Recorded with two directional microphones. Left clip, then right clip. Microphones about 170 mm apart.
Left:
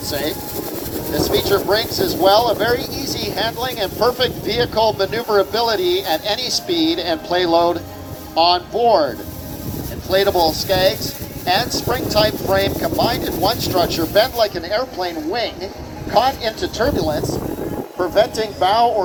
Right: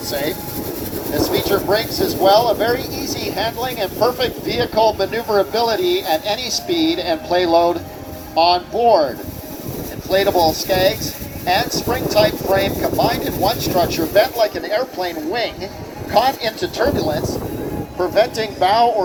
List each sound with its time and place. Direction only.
0.1 s speech: 45° right (ahead or behind); by 19.0 s 15° right (ahead or behind)